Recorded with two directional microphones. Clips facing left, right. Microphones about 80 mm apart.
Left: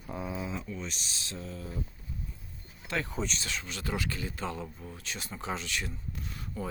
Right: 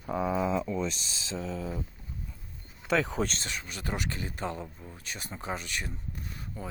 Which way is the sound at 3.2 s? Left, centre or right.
Right.